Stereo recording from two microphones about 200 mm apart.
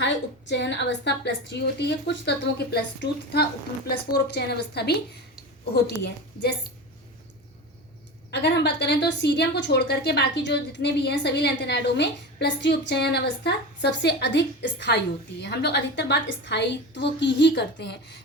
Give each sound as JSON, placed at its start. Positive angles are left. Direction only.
{"t": 0.0, "sound": "a woman's voice", "side_deg": 60}
{"t": 8.3, "sound": "a woman's voice", "side_deg": 55}